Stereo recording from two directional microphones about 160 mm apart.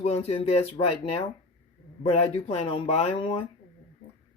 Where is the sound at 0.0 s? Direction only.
40° left (ahead or behind).